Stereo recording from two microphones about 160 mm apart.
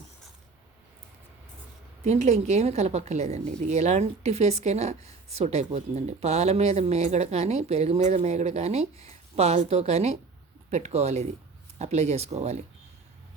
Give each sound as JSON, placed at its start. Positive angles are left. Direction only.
{"t": 2.0, "sound": "a woman's voice", "side_deg": -45}